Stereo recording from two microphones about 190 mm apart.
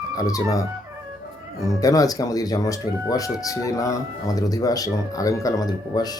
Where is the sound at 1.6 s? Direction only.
20° left (ahead or behind).